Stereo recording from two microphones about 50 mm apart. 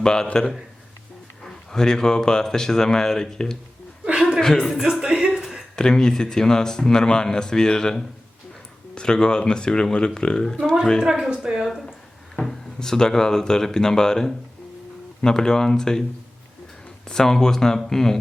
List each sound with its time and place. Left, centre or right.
0.0 s a man's voice: centre
1.5 s speech: centre
4.0 s chuckle: right
4.4 s speech: centre
4.8 s music: centre
5.4 s a sound: centre
5.7 s speech: centre
11.0 s speech: centre
12.4 s speech: centre
17.1 s speech: centre